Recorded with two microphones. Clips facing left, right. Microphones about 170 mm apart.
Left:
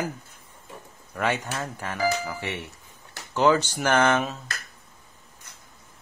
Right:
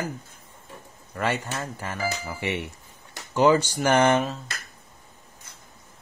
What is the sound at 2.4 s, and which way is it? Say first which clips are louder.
Speech: right 4 dB; 15° right (ahead or behind).